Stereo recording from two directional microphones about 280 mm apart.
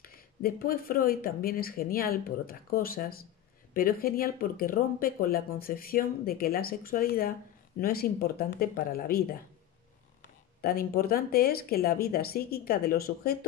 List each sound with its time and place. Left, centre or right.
0.0 s speech: left
10.6 s speech: left